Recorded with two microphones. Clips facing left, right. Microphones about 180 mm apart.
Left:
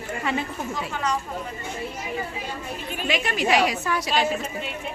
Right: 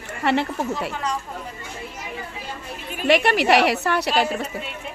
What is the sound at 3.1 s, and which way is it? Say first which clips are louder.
A woman's voice: right 6 dB; 70° right (ahead or behind).